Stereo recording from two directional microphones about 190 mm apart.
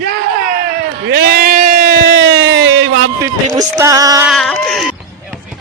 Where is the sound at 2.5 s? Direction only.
85° right.